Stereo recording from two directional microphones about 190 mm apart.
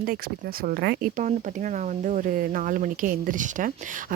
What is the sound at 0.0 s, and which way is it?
Speech, 50° right (ahead or behind).